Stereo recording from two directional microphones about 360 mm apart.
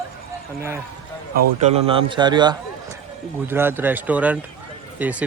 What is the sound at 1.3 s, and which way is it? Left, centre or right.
A man's voice, centre.